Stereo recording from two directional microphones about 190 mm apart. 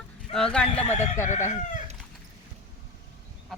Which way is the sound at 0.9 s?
40° left (ahead or behind).